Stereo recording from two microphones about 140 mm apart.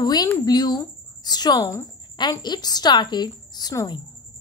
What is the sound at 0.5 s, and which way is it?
A woman's voice, 30° left (ahead or behind).